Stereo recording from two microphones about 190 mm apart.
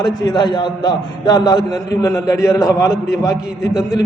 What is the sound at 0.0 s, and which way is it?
A man's voice, 20° left (ahead or behind).